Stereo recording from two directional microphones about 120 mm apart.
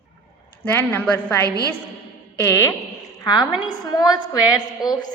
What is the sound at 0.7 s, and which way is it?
Speech, 15° left (ahead or behind).